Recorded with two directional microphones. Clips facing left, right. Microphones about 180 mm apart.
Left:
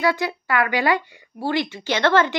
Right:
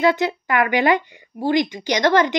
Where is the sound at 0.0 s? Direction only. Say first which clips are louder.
Right 4 dB; 20° right (ahead or behind).